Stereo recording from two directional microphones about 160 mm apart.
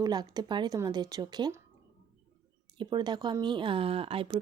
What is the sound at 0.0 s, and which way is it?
Speech, 25° right (ahead or behind).